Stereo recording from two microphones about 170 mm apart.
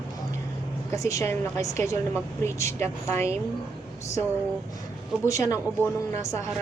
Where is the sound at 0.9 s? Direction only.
15° left (ahead or behind).